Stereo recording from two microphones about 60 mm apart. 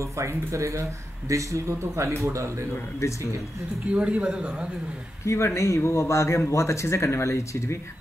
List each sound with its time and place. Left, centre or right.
0.0 s speech: right
3.0 s a man's voice: left
3.9 s speech: centre
5.2 s a man's voice: left